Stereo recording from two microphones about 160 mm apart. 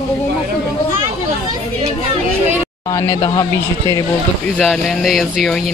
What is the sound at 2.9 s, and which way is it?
Speech, 20° left (ahead or behind).